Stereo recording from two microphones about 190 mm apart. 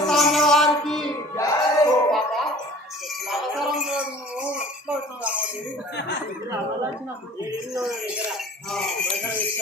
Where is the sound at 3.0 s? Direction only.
Centre (ahead or behind).